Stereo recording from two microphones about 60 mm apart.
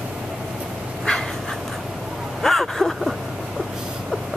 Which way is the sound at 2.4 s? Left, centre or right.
Centre.